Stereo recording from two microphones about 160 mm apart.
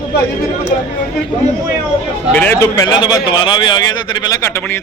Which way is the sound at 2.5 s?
20° left (ahead or behind).